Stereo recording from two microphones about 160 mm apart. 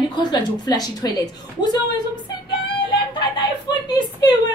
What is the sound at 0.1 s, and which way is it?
Speech, 25° left (ahead or behind).